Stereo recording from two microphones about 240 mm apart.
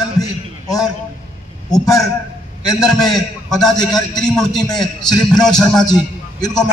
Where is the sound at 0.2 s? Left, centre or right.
Centre.